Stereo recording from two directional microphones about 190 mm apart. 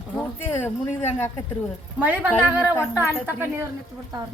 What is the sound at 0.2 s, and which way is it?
Speech, 10° left (ahead or behind).